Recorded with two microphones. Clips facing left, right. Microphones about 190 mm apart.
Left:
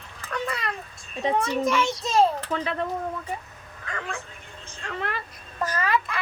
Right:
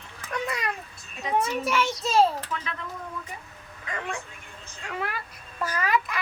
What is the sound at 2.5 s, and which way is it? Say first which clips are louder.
Speech: left 6 dB; 30° left (ahead or behind).